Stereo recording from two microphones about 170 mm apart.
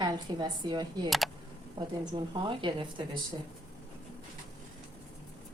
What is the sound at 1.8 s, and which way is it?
A woman's voice, 25° right (ahead or behind).